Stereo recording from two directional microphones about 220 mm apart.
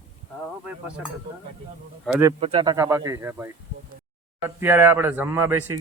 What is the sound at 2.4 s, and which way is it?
Speech, 25° right (ahead or behind).